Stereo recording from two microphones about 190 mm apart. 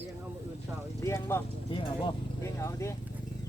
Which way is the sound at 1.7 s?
25° left (ahead or behind).